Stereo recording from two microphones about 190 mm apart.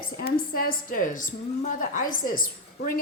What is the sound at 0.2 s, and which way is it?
A woman's voice, 50° left (ahead or behind).